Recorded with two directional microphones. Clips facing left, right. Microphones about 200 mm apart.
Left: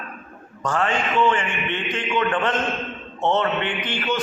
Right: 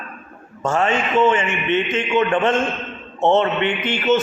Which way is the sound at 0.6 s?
25° right (ahead or behind).